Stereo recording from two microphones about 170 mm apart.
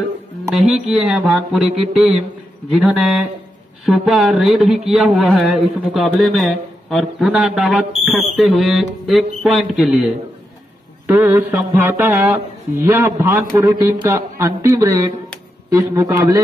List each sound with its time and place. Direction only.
0.5 s a man's voice: centre (ahead or behind)
11.1 s a man's voice: 15° right (ahead or behind)